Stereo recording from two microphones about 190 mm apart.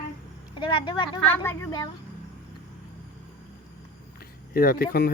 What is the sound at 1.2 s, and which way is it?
Speech, 10° left (ahead or behind).